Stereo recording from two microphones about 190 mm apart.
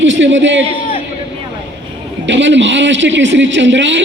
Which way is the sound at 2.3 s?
70° right (ahead or behind).